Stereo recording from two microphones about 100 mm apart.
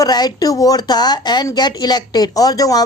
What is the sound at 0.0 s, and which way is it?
A woman's voice, 45° left (ahead or behind).